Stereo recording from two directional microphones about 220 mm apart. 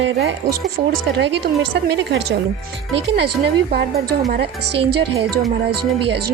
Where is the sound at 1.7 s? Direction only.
55° right (ahead or behind).